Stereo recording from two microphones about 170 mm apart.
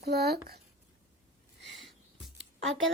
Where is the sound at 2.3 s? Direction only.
90° right.